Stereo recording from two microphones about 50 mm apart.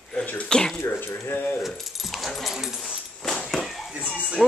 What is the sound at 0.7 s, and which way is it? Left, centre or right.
Speech, left.